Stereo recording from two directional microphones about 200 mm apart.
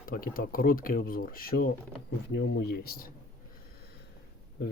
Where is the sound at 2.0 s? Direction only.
60° left (ahead or behind).